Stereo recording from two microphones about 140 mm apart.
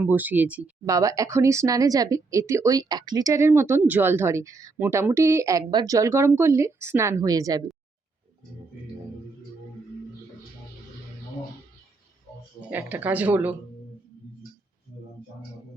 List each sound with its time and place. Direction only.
0.0 s speech: 10° right (ahead or behind)
0.9 s speech: 25° right (ahead or behind)
12.7 s speech: 10° right (ahead or behind)